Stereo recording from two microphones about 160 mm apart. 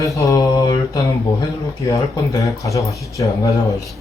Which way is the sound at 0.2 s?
20° left (ahead or behind).